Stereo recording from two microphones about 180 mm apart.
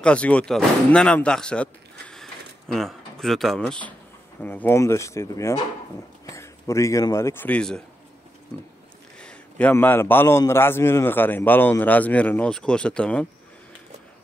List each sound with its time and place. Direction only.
0.0 s a man's voice: 5° left (ahead or behind)
9.2 s a man's voice: 5° left (ahead or behind)